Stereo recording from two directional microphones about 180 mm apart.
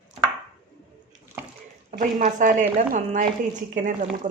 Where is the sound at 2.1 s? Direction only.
45° right (ahead or behind).